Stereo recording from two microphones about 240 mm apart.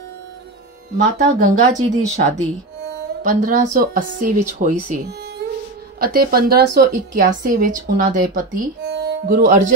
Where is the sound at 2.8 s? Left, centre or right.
Right.